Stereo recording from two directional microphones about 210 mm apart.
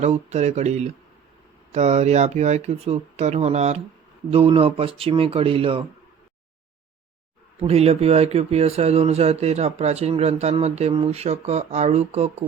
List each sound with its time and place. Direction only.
0.0 s speech: 30° right (ahead or behind)
7.6 s speech: 30° right (ahead or behind)